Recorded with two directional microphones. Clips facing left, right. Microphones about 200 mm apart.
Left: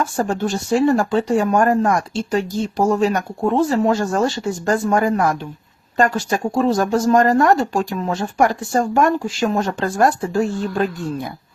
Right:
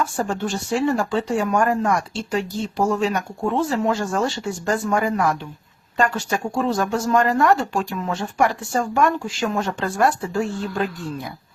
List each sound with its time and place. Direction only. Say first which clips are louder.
0.2 s speech: left 4 dB; 45° left (ahead or behind)